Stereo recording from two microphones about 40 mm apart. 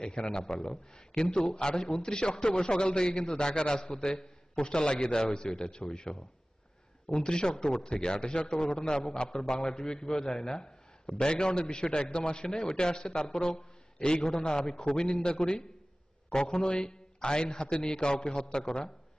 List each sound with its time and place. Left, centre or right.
0.0 s a man's voice: left